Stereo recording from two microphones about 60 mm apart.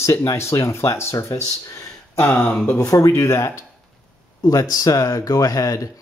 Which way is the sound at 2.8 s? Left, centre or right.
Left.